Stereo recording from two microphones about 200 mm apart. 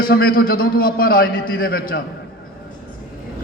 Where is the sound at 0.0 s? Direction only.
50° left (ahead or behind).